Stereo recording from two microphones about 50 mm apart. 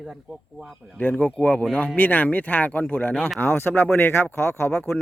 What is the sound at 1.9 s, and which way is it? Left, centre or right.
Speech, left.